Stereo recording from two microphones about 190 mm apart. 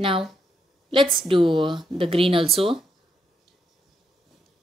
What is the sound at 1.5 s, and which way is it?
Speech, 25° right (ahead or behind).